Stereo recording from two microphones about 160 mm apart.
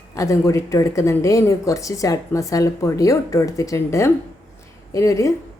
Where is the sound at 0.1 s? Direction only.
20° left (ahead or behind).